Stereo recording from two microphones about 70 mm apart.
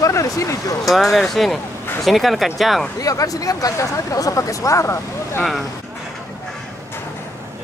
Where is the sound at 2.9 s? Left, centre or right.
Left.